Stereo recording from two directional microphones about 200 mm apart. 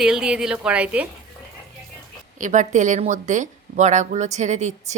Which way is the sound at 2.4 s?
40° right (ahead or behind).